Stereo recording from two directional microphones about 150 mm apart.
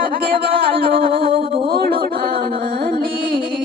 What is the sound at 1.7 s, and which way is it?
Music, 90° right.